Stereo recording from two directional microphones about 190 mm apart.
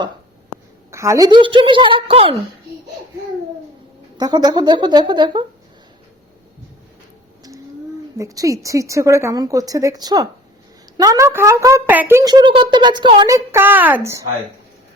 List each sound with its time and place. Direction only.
0.9 s a woman's voice: 15° right (ahead or behind); by 2.4 s 30° right (ahead or behind)
4.2 s a woman's voice: 20° right (ahead or behind)
8.2 s speech: 15° right (ahead or behind)